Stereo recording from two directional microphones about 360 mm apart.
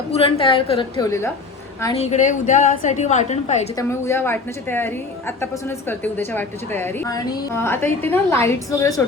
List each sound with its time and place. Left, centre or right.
0.1 s a woman's voice: centre
4.0 s a woman's voice: centre